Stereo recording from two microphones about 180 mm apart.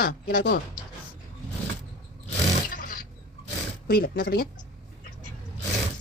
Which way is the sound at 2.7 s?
50° left (ahead or behind).